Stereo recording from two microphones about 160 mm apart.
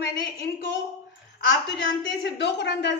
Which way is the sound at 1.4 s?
90° left.